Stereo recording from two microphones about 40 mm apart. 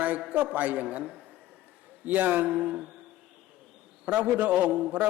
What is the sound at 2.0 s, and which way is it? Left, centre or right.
Speech, right.